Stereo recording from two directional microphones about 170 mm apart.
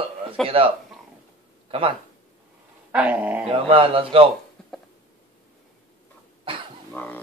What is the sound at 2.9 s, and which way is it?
Dog, 10° right (ahead or behind).